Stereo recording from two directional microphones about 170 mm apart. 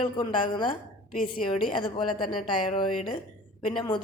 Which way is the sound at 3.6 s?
30° left (ahead or behind).